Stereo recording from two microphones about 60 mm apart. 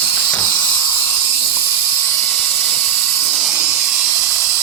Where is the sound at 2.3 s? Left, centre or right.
Left.